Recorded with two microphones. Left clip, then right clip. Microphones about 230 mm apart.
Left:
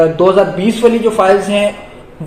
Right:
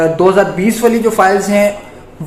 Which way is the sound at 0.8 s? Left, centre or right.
Right.